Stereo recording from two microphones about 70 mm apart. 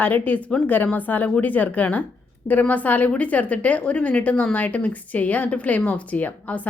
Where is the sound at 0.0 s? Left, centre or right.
Left.